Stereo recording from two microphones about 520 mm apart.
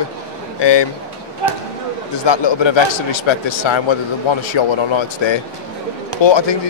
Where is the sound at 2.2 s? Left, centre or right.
Left.